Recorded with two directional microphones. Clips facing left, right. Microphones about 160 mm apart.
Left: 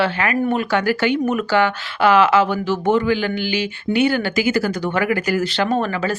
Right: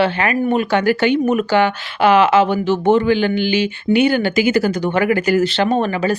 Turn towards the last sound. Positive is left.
turn(degrees=-20)  # may be behind; listen again after turning